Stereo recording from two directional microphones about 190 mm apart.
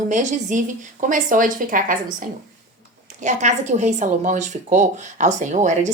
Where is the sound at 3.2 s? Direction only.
40° right (ahead or behind).